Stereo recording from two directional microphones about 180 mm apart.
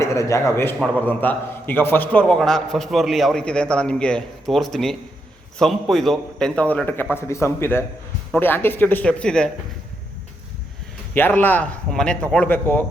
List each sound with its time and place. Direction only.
0.0 s a man's voice: 15° left (ahead or behind)
11.1 s a man's voice: 10° left (ahead or behind)